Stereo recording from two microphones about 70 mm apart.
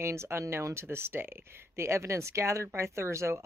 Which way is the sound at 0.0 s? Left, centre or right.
Right.